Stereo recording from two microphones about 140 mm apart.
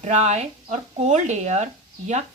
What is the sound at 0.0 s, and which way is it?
A woman's voice, 55° right (ahead or behind).